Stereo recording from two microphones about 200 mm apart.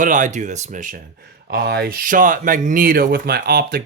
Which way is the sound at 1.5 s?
55° right (ahead or behind).